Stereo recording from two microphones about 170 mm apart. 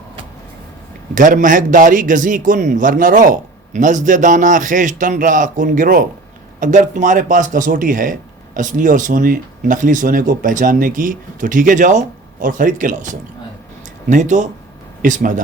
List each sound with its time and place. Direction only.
1.1 s a man's voice: 50° right (ahead or behind)